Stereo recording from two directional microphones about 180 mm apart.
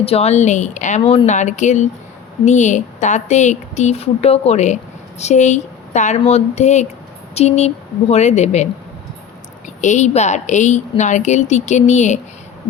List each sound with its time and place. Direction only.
0.0 s a woman's voice: 35° left (ahead or behind)
9.8 s a woman's voice: 40° left (ahead or behind)